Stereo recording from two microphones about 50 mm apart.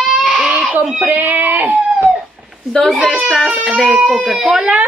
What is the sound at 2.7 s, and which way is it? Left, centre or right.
Speech, centre.